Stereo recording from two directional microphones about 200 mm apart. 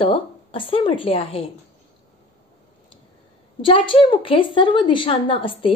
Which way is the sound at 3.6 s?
25° left (ahead or behind).